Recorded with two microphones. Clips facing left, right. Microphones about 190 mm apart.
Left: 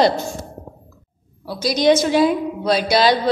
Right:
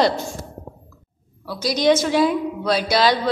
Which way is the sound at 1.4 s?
25° left (ahead or behind).